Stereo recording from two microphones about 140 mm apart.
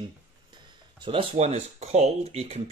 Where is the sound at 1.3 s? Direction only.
50° right (ahead or behind).